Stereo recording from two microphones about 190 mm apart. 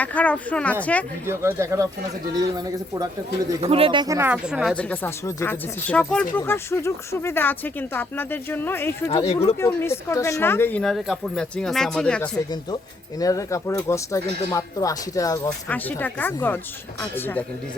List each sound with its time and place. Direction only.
0.0 s speech: 10° left (ahead or behind)
1.3 s speech: 15° right (ahead or behind)
3.6 s speech: 30° right (ahead or behind); by 4.7 s 5° right (ahead or behind)
4.7 s speech: 5° left (ahead or behind)
13.1 s speech: 15° left (ahead or behind)